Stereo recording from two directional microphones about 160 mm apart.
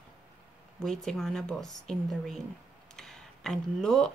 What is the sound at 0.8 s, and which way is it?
Speech, centre (ahead or behind).